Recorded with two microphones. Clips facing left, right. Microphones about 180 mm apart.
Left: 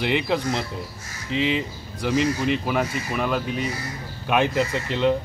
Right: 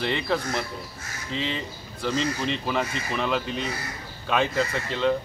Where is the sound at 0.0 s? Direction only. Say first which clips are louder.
Left 3 dB; 15° left (ahead or behind).